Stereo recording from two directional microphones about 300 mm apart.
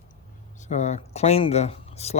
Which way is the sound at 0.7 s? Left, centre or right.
Left.